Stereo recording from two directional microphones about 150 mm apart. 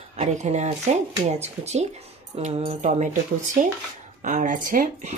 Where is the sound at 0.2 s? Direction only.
50° right (ahead or behind).